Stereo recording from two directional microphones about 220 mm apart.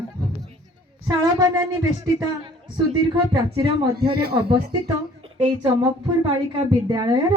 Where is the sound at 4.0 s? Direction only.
45° right (ahead or behind).